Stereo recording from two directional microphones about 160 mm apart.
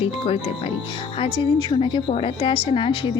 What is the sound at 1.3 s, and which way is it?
A woman's voice, 30° left (ahead or behind).